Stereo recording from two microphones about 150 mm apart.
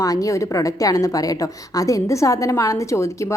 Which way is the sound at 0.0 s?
20° left (ahead or behind).